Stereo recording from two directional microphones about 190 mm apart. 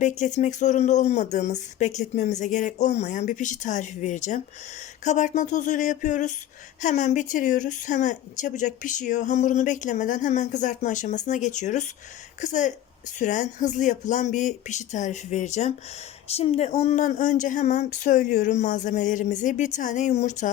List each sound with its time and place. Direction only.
0.0 s speech: 40° left (ahead or behind)